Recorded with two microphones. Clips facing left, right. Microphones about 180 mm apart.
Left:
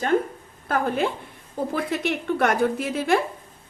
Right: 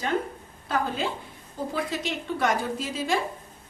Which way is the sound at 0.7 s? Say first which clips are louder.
Left 4 dB; 55° left (ahead or behind).